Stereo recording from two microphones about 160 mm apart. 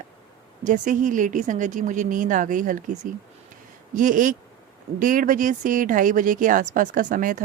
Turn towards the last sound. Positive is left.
turn(degrees=-55)  # may be behind; listen again after turning